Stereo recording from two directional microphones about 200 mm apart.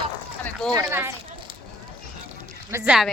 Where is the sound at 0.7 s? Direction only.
15° right (ahead or behind).